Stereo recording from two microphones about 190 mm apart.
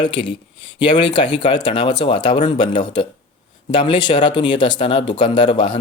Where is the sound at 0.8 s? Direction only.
25° left (ahead or behind).